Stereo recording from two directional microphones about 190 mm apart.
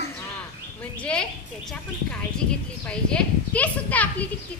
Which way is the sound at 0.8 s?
5° left (ahead or behind).